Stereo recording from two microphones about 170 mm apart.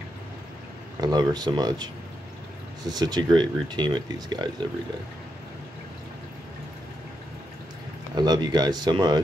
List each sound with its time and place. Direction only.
1.0 s speech: 25° right (ahead or behind)
8.1 s speech: 25° right (ahead or behind)